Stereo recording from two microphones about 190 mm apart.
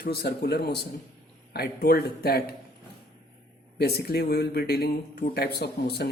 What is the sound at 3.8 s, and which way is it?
Speech, 55° left (ahead or behind).